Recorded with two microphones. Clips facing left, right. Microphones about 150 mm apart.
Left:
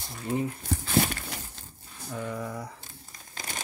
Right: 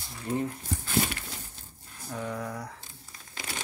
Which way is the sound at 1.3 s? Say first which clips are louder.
Left 4 dB; 80° left.